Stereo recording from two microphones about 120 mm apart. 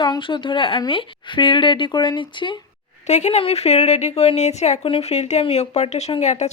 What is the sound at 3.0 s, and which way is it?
Speech, 70° left (ahead or behind).